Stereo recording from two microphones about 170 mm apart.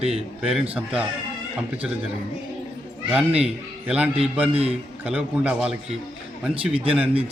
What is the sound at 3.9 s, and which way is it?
Speech, 5° right (ahead or behind).